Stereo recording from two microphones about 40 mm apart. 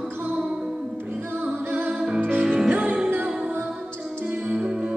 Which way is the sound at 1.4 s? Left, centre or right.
Right.